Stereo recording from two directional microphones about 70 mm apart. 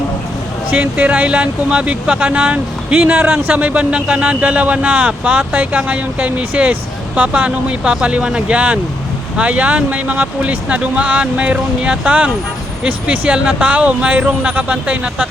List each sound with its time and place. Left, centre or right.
0.8 s speech: centre